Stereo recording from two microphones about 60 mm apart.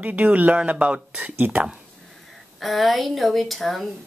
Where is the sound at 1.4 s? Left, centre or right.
Right.